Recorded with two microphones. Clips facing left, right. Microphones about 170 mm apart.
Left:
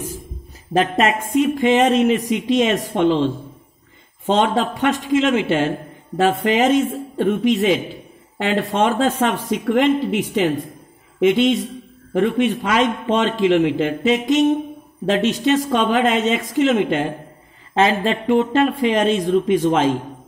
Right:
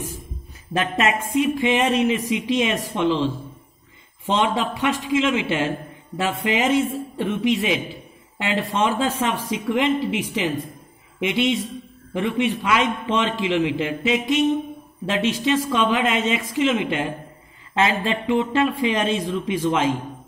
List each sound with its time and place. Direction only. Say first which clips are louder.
0.7 s a man's voice: left 4 dB; 40° left (ahead or behind)
4.4 s a man's voice: left 3 dB; 45° left (ahead or behind)
11.1 s a man's voice: left 6 dB; 45° left (ahead or behind)